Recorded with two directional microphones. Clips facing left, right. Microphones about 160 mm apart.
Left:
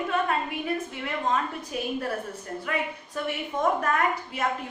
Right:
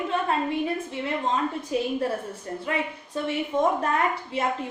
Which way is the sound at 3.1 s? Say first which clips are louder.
Right 4 dB; 25° right (ahead or behind).